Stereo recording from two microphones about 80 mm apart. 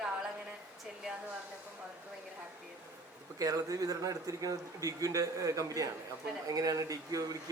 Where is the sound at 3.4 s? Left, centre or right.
Right.